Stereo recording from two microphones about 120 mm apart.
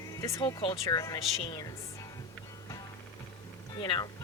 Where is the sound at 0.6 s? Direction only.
35° left (ahead or behind).